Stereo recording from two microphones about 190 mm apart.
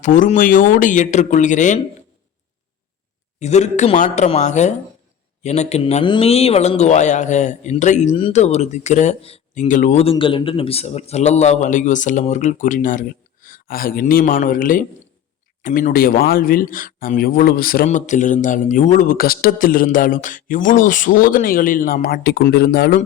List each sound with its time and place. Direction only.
0.0 s a man's voice: 40° left (ahead or behind)
3.4 s a man's voice: 35° left (ahead or behind)
10.0 s a man's voice: 30° left (ahead or behind); by 23.0 s 55° left (ahead or behind)